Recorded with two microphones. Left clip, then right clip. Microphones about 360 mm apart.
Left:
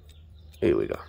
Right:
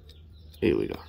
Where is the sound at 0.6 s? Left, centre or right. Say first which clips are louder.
Left 2 dB; left.